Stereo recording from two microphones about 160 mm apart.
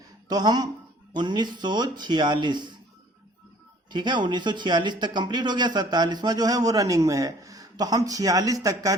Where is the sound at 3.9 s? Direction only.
30° right (ahead or behind).